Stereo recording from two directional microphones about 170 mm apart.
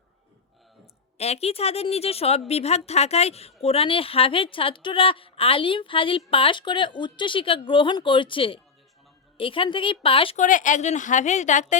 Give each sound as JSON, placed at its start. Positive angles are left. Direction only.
{"t": 1.2, "sound": "a woman's voice", "side_deg": 40}
{"t": 10.3, "sound": "a woman's voice", "side_deg": 50}